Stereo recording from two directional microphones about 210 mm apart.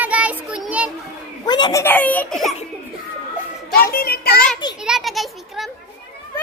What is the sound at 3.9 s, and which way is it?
Speech, 45° left (ahead or behind).